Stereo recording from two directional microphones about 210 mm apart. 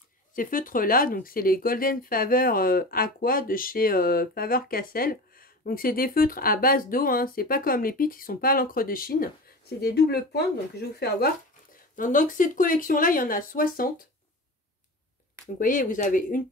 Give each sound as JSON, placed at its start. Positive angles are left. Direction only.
{"t": 0.3, "sound": "speech", "side_deg": 40}
{"t": 15.6, "sound": "speech", "side_deg": 40}